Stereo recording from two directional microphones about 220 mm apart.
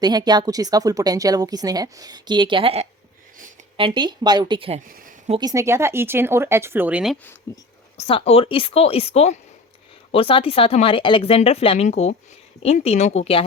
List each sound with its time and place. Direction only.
0.0 s a woman's voice: 20° right (ahead or behind)
4.9 s speech: 40° right (ahead or behind)
5.4 s speech: 15° right (ahead or behind)
7.5 s speech: 15° left (ahead or behind)
7.9 s speech: 30° left (ahead or behind)